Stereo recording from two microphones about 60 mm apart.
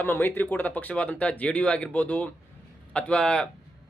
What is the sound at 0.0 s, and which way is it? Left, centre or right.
A man's voice, left.